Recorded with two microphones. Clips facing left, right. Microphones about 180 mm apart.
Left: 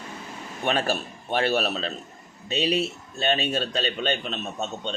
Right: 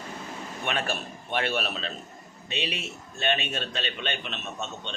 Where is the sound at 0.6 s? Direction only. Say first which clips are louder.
Left 6 dB; 35° left (ahead or behind).